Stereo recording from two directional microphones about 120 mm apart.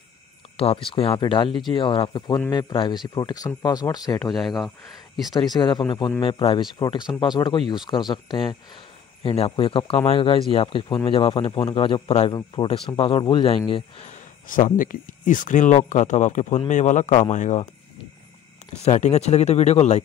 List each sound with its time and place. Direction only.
0.6 s speech: 50° left (ahead or behind); by 4.2 s 35° left (ahead or behind)
4.3 s speech: centre (ahead or behind)
5.3 s speech: 35° left (ahead or behind)
9.2 s speech: 55° left (ahead or behind)
12.3 s speech: 40° left (ahead or behind)
14.0 s speech: 90° left
18.9 s speech: 75° left (ahead or behind)